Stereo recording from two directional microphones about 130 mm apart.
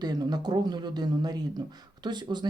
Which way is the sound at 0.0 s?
30° right (ahead or behind).